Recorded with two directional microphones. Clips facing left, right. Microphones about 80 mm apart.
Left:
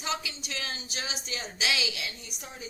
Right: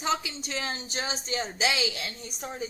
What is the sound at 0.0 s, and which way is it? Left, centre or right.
A woman's voice, right.